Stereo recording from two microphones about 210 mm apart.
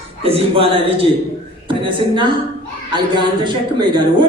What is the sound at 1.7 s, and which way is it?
A woman's voice, 25° right (ahead or behind).